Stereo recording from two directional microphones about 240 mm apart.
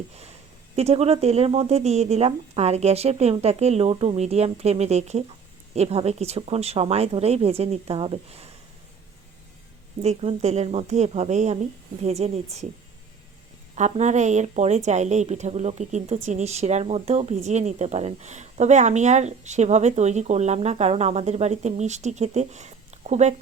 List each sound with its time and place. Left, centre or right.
0.8 s a woman's voice: right
10.0 s a woman's voice: right
13.7 s a woman's voice: right